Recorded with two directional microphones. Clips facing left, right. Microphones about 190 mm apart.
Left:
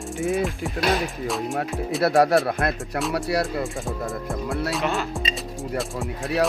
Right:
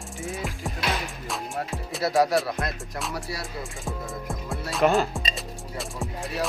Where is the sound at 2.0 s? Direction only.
60° left (ahead or behind).